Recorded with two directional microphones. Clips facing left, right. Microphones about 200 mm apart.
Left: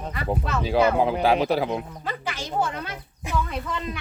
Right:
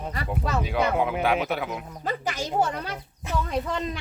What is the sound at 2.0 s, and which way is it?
Speech, 40° right (ahead or behind).